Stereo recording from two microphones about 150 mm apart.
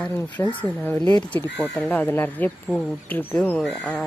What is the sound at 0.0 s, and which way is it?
Speech, 15° left (ahead or behind).